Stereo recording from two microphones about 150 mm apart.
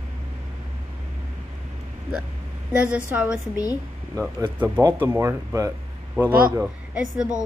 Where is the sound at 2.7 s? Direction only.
10° right (ahead or behind).